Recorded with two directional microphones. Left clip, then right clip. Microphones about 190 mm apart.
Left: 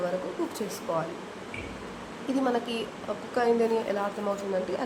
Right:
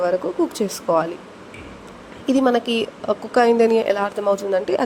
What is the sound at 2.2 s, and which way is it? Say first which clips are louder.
Speech: right 10 dB; 40° right (ahead or behind).